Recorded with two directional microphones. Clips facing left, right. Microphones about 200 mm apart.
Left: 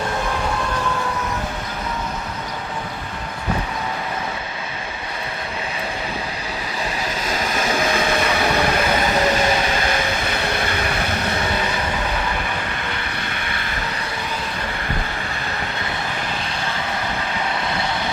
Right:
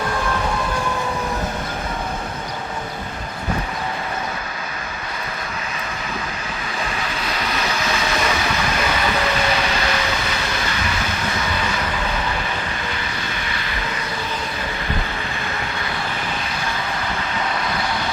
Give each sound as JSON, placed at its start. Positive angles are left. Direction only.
{"t": 7.3, "sound": "vehicle", "side_deg": 45}
{"t": 9.0, "sound": "vehicle", "side_deg": 40}
{"t": 9.9, "sound": "vehicle", "side_deg": 50}
{"t": 12.9, "sound": "vehicle", "side_deg": 55}